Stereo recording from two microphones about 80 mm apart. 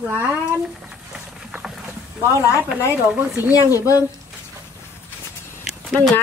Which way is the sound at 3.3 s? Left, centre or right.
Right.